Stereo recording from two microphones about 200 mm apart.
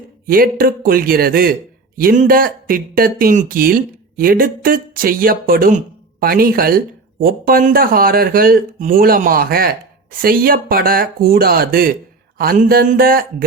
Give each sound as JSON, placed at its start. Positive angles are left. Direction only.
{"t": 0.3, "sound": "speech", "side_deg": -45}